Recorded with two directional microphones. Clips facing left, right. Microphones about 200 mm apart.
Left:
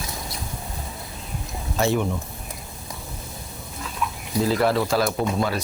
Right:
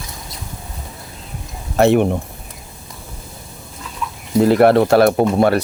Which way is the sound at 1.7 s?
65° right (ahead or behind).